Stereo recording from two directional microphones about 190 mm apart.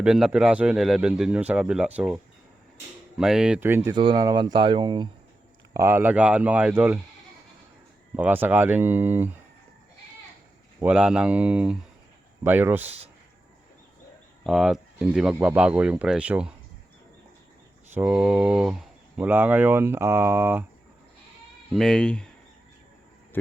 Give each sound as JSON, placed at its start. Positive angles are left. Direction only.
{"t": 0.0, "sound": "a man's voice", "side_deg": -5}
{"t": 3.2, "sound": "a man's voice", "side_deg": -5}
{"t": 3.9, "sound": "speech", "side_deg": -25}
{"t": 5.7, "sound": "speech", "side_deg": -15}
{"t": 8.1, "sound": "speech", "side_deg": -10}
{"t": 10.8, "sound": "a man's voice", "side_deg": -5}
{"t": 14.4, "sound": "a man's voice", "side_deg": 0}
{"t": 17.9, "sound": "speech", "side_deg": -5}
{"t": 21.7, "sound": "a man's voice", "side_deg": 0}
{"t": 23.3, "sound": "a sound", "side_deg": 10}